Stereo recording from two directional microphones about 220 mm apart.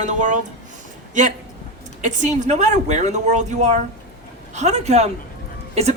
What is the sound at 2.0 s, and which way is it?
A man's voice, 35° right (ahead or behind).